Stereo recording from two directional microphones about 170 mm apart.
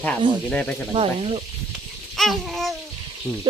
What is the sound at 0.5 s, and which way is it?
Speech, 5° left (ahead or behind).